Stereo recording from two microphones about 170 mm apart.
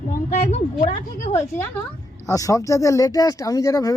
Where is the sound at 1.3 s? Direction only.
15° left (ahead or behind).